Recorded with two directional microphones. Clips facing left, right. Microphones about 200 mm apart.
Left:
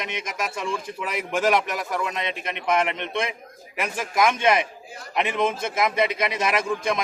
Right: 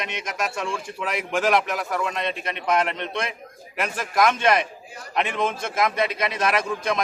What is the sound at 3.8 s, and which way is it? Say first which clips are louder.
A man's voice: right 1 dB; 5° left (ahead or behind).